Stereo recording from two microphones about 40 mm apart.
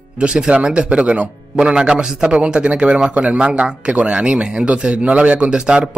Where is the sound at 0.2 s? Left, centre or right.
Right.